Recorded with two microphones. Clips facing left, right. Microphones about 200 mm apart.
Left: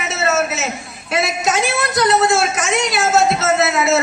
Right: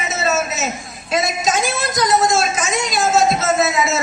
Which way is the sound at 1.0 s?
65° left (ahead or behind).